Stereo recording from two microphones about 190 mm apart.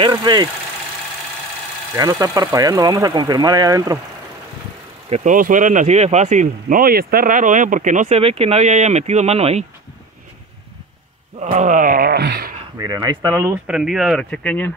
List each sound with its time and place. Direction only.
0.0 s speech: 20° right (ahead or behind)
2.0 s speech: 20° right (ahead or behind)
5.1 s speech: 40° right (ahead or behind)
11.3 s wail: 40° right (ahead or behind); by 12.5 s 55° right (ahead or behind)
12.7 s speech: 20° right (ahead or behind)
13.7 s speech: 5° right (ahead or behind)